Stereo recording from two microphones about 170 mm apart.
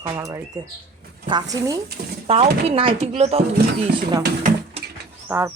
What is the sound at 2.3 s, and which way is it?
Speech, 35° right (ahead or behind).